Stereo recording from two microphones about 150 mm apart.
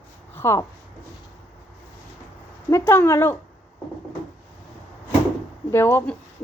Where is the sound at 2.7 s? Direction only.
15° left (ahead or behind).